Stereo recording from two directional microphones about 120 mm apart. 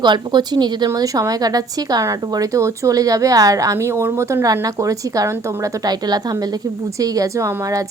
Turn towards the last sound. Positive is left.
turn(degrees=-25)  # may be behind; listen again after turning